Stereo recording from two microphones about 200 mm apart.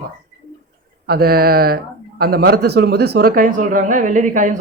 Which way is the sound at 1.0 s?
50° right (ahead or behind).